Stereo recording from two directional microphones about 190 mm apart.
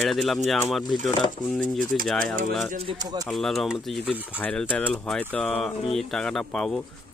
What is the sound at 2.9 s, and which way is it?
Speech, 20° right (ahead or behind).